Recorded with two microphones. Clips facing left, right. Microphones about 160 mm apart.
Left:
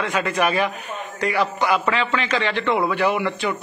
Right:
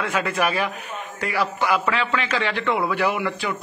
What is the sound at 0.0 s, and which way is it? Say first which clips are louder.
A man's voice: left 2 dB; 5° right (ahead or behind).